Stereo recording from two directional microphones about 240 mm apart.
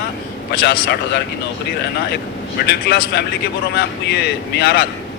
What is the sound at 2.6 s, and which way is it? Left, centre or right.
Speech, left.